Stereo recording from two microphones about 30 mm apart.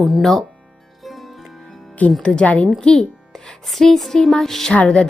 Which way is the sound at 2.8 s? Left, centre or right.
Left.